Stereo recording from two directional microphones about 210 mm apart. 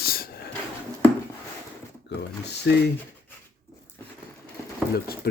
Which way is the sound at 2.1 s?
55° left (ahead or behind).